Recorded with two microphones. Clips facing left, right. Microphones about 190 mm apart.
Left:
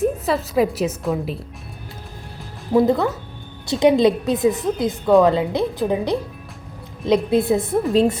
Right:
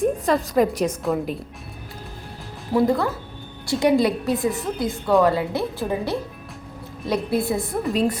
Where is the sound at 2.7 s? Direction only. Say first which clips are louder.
Left 3 dB; 20° left (ahead or behind).